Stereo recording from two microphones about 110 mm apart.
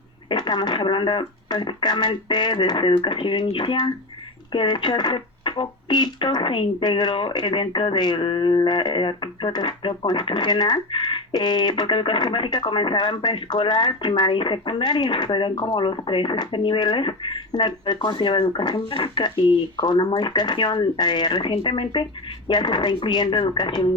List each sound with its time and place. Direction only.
0.3 s speech: 45° left (ahead or behind)